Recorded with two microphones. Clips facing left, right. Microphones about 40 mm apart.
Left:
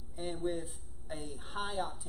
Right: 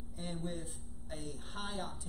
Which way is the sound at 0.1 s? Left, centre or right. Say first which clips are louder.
Left 6 dB; centre.